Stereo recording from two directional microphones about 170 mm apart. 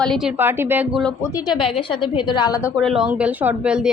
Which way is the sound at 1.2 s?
20° left (ahead or behind).